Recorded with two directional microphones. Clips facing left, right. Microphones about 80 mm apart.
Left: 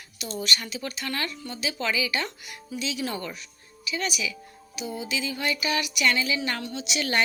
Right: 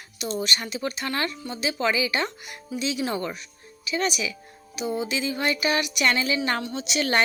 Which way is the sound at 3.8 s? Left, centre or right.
Right.